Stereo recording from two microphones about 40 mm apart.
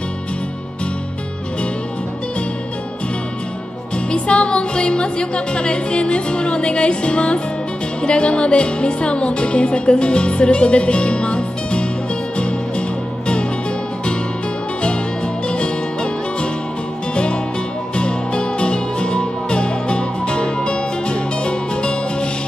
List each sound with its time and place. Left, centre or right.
4.1 s speech: left
12.4 s music: left
15.4 s music: left
17.1 s music: left